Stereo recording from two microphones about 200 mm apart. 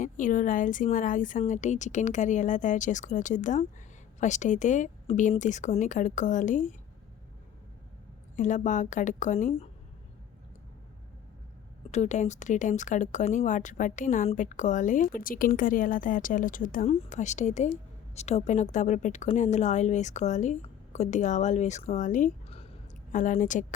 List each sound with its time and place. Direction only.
0.0 s speech: 40° left (ahead or behind)
8.4 s speech: 40° left (ahead or behind)
11.9 s speech: 35° left (ahead or behind)